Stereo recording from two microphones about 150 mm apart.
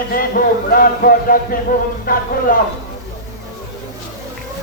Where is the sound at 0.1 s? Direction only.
70° left (ahead or behind).